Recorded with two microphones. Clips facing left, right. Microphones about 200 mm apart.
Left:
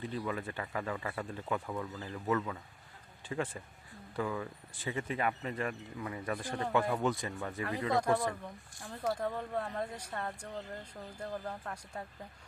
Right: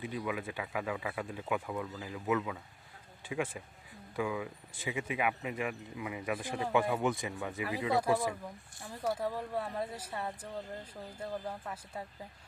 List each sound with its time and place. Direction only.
0.3 s speech: 10° right (ahead or behind)
7.0 s speech: 15° right (ahead or behind)